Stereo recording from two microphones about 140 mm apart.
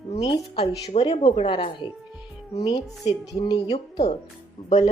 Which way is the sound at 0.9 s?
45° left (ahead or behind).